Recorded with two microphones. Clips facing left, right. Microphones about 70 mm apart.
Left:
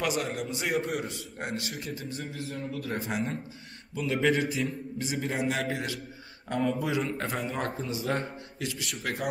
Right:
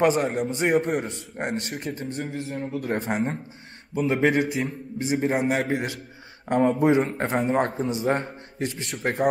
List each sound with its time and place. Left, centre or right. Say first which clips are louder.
0.0 s a man's voice: right 9 dB; right
3.9 s a man's voice: right 5 dB; right